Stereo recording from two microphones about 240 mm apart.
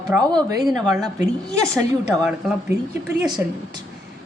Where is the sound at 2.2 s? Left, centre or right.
Centre.